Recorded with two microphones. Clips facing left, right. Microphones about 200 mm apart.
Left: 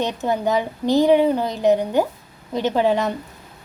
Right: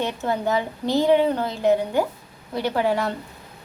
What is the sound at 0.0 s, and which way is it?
A woman's voice, 15° left (ahead or behind).